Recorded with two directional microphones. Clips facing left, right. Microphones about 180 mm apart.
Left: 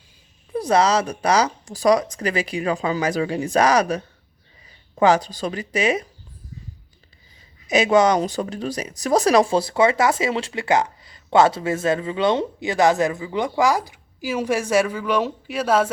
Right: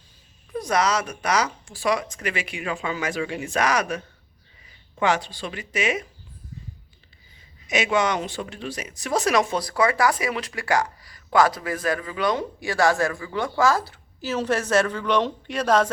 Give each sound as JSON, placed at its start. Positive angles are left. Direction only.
{"t": 0.5, "sound": "speech", "side_deg": 30}
{"t": 7.7, "sound": "speech", "side_deg": 35}